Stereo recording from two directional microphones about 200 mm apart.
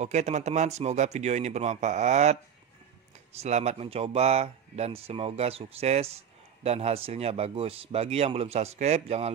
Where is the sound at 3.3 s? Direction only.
35° right (ahead or behind).